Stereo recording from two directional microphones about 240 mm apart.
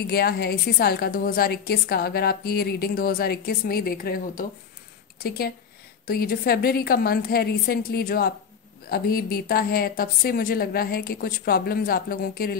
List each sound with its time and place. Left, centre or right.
0.0 s a woman's voice: left
6.0 s a woman's voice: left